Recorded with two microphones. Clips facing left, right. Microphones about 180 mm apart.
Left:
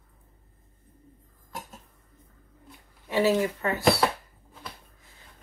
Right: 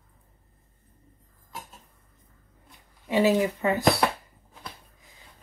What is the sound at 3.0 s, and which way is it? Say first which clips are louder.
Speech: right 2 dB; 15° right (ahead or behind).